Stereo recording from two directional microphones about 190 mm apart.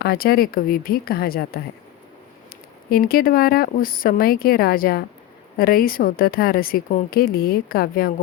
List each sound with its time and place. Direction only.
0.0 s a woman's voice: 50° left (ahead or behind)
2.9 s a woman's voice: 50° left (ahead or behind)